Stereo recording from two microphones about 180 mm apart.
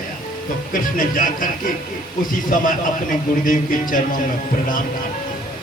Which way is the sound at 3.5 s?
50° left (ahead or behind).